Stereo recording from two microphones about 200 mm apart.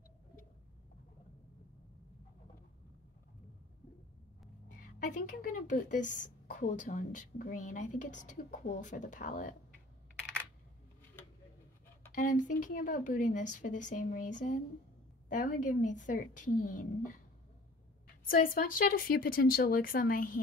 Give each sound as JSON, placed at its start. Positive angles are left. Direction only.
{"t": 4.9, "sound": "a woman's voice", "side_deg": 40}
{"t": 12.2, "sound": "a woman's voice", "side_deg": 40}
{"t": 18.2, "sound": "speech", "side_deg": 45}